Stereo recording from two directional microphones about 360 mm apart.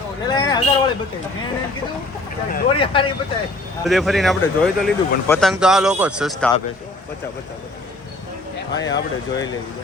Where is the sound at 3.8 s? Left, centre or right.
Centre.